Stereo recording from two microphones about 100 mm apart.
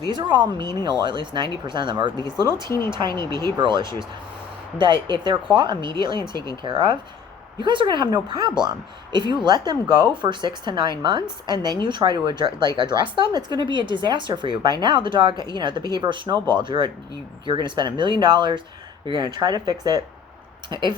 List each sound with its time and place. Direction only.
0.1 s speech: 50° right (ahead or behind)